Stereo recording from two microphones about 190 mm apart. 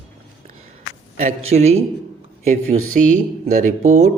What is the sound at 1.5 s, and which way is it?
Speech, 35° right (ahead or behind).